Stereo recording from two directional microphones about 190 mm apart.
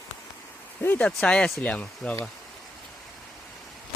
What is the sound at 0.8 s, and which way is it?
Speech, 10° left (ahead or behind).